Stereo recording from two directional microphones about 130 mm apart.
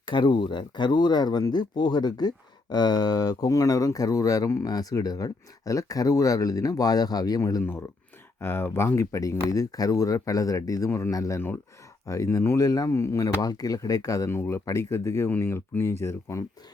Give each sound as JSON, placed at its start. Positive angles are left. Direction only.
{"t": 0.0, "sound": "speech", "side_deg": 35}
{"t": 7.6, "sound": "speech", "side_deg": 15}